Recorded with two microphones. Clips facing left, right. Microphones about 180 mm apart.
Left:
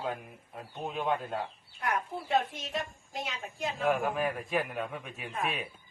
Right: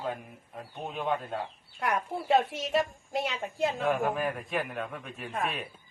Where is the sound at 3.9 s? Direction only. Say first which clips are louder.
Left 4 dB; centre (ahead or behind).